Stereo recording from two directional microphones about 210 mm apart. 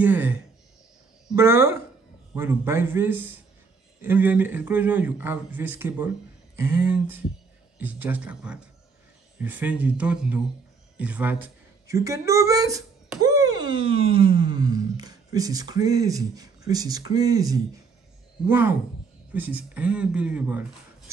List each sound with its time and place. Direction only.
0.0 s a woman's voice: 10° right (ahead or behind)